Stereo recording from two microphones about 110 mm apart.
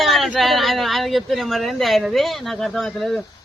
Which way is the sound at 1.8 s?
Centre (ahead or behind).